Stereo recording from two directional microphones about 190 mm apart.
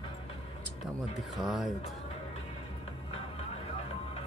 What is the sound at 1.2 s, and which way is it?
Speech, centre (ahead or behind).